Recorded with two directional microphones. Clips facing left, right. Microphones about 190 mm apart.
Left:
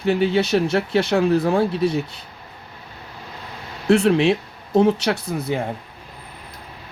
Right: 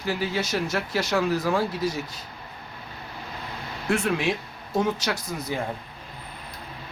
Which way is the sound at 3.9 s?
25° left (ahead or behind).